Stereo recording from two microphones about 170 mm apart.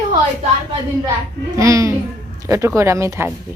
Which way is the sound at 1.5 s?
20° right (ahead or behind).